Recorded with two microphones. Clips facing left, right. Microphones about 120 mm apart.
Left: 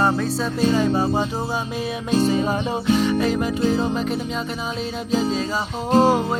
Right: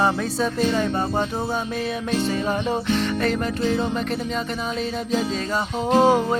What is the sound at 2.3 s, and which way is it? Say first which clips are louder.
Music: left 2 dB; 15° left (ahead or behind).